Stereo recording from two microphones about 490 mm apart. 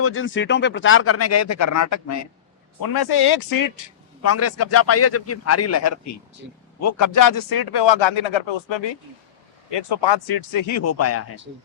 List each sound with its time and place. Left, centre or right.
0.0 s speech: left
2.8 s a man's voice: left